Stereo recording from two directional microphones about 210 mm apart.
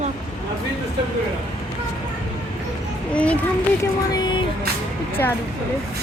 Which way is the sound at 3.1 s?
5° left (ahead or behind).